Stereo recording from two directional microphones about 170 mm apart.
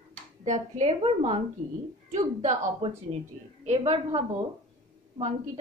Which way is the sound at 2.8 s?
35° right (ahead or behind).